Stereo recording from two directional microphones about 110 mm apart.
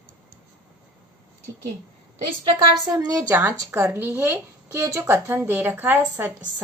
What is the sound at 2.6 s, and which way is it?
Speech, 40° right (ahead or behind).